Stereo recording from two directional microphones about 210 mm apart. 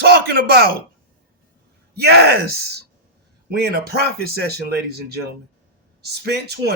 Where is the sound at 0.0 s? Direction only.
45° right (ahead or behind).